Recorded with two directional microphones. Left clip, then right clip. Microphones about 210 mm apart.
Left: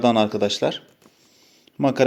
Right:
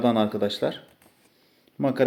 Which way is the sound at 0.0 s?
30° left (ahead or behind).